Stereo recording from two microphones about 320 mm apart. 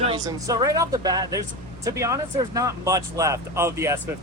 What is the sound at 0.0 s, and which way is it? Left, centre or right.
Speech, centre.